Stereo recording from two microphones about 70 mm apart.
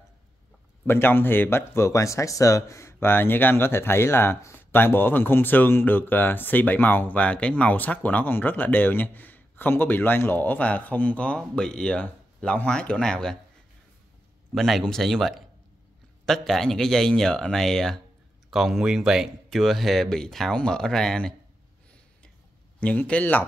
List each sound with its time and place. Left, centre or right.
0.8 s speech: left; by 13.4 s centre
14.5 s speech: centre
22.8 s speech: centre